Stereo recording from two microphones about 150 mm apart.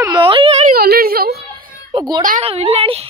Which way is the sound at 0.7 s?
85° right.